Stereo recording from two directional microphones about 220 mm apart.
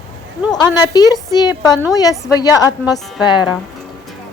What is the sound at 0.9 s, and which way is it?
A woman's voice, 15° left (ahead or behind).